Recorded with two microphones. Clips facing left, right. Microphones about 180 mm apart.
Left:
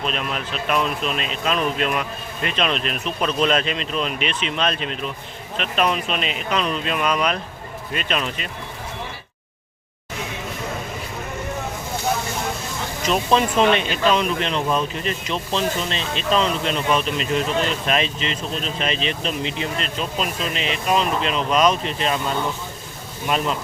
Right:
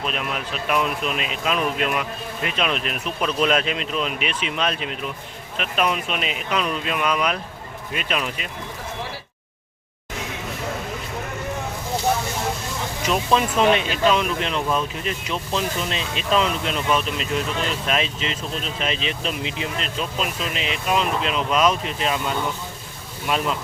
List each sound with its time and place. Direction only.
0.0 s speech: 10° right (ahead or behind)
13.1 s speech: 5° right (ahead or behind)